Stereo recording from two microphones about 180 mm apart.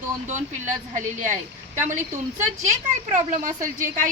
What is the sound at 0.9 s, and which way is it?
Speech, 45° right (ahead or behind).